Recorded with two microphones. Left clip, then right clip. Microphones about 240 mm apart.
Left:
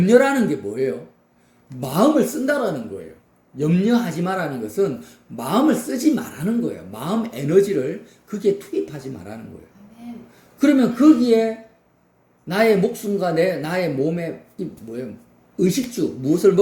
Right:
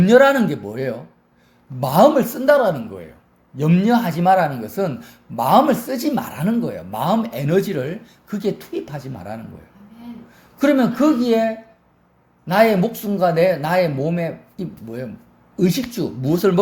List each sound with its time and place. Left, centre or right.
0.0 s a woman's voice: right
10.6 s a woman's voice: right